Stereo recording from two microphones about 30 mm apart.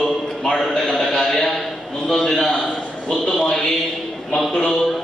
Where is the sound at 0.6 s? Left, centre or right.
Centre.